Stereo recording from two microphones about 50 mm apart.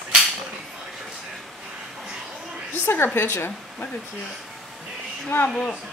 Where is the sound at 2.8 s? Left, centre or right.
Left.